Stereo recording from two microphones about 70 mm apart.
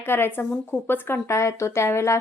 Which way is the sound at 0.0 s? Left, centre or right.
Left.